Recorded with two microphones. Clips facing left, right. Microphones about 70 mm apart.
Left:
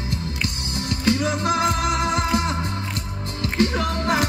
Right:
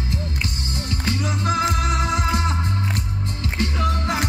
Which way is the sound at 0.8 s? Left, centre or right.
Left.